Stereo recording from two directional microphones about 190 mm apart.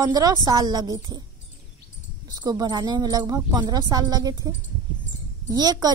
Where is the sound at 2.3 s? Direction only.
20° right (ahead or behind).